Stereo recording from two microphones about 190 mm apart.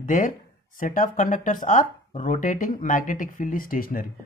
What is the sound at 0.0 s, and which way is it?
Speech, 45° left (ahead or behind).